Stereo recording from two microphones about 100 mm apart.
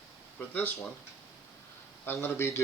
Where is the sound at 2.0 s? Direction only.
25° left (ahead or behind).